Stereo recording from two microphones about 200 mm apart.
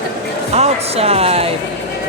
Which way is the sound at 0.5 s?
30° right (ahead or behind).